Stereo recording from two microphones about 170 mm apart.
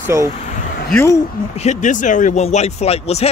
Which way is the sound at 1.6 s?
45° left (ahead or behind).